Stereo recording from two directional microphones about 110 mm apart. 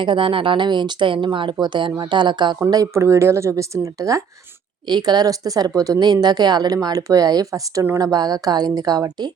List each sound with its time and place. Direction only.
0.0 s speech: 50° right (ahead or behind)
2.9 s speech: 25° right (ahead or behind)
4.9 s speech: 40° right (ahead or behind)